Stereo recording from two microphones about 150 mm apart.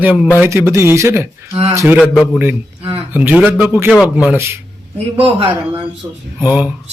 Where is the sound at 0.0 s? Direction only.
10° right (ahead or behind).